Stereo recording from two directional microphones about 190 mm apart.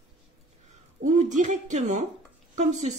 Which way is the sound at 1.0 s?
40° right (ahead or behind).